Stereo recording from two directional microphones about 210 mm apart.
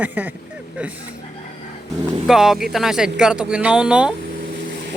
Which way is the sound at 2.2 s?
Centre (ahead or behind).